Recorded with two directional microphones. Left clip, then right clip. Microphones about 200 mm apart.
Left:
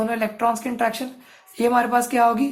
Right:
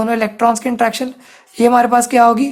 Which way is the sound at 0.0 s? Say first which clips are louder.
Right 7 dB; 40° right (ahead or behind).